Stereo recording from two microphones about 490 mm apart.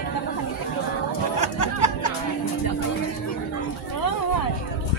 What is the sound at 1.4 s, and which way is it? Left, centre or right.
Music, left.